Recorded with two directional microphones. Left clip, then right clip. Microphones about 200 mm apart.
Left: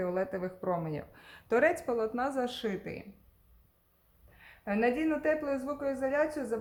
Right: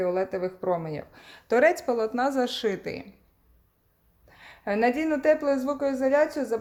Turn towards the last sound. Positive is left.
turn(degrees=-25)  # may be behind; listen again after turning